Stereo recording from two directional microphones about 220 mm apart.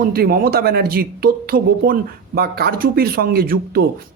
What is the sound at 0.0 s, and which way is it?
Speech, 40° right (ahead or behind).